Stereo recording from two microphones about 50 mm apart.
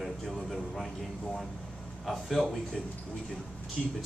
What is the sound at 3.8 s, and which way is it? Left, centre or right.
Speech, centre.